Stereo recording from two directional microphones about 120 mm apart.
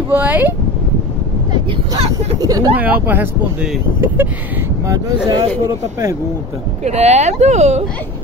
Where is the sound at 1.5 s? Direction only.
40° right (ahead or behind).